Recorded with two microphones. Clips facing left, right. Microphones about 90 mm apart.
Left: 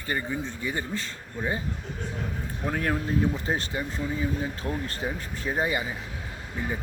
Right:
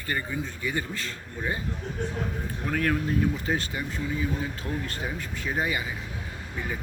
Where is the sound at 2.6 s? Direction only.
25° left (ahead or behind).